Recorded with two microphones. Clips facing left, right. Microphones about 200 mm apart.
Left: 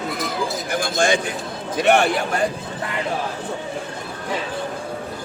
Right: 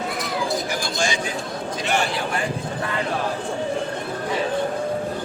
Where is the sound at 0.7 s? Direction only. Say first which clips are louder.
Left 5 dB; 55° left (ahead or behind).